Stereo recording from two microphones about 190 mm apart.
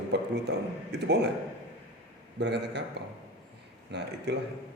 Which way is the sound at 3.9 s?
65° right (ahead or behind).